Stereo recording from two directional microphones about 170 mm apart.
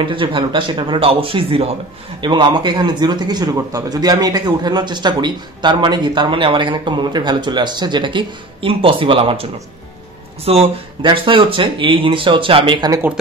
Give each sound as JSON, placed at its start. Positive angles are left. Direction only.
{"t": 0.0, "sound": "speech", "side_deg": -30}